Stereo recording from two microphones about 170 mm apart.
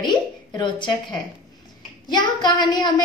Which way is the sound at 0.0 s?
25° left (ahead or behind).